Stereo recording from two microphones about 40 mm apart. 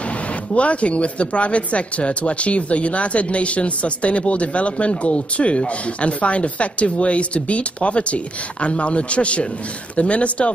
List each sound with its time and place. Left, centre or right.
0.6 s speech: left